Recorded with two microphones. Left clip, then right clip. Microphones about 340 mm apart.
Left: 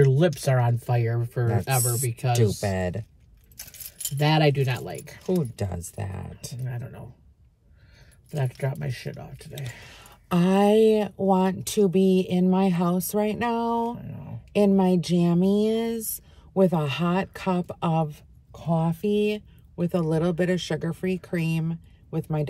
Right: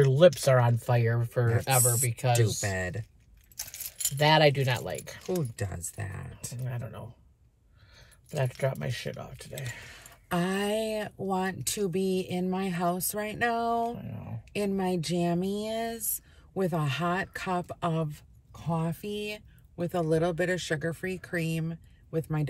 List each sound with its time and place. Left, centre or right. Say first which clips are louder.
0.0 s speech: right 2 dB; centre
2.6 s speech: left 5 dB; centre
3.5 s speech: right 3 dB; centre
5.2 s speech: left 7 dB; centre
6.6 s speech: right 2 dB; right
8.3 s speech: right 1 dB; right
10.2 s speech: left 8 dB; centre
14.5 s speech: left 9 dB; centre